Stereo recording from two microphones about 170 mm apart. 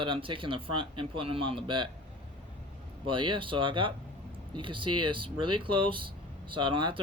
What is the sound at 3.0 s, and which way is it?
Speech, 30° right (ahead or behind).